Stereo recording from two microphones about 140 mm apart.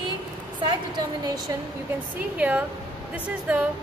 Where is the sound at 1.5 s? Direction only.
25° right (ahead or behind).